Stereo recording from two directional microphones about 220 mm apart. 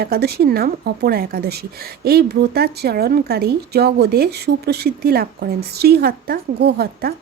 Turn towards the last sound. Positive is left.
turn(degrees=-45)  # may be behind; listen again after turning